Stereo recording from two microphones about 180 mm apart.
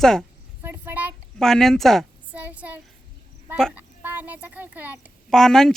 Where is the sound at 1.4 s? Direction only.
5° left (ahead or behind).